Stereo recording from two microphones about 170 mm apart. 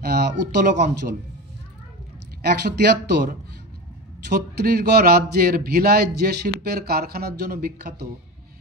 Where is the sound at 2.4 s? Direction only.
70° right (ahead or behind).